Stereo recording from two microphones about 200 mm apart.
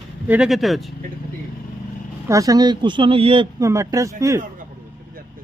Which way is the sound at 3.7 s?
15° right (ahead or behind).